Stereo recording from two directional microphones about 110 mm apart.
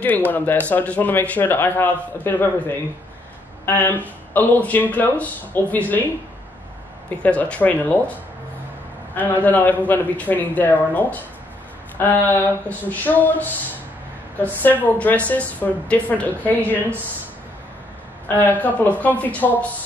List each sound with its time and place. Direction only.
0.0 s speech: 15° left (ahead or behind)
7.2 s speech: 10° left (ahead or behind)
9.1 s speech: 15° left (ahead or behind)
12.3 s speech: 15° left (ahead or behind)
18.3 s speech: 15° left (ahead or behind)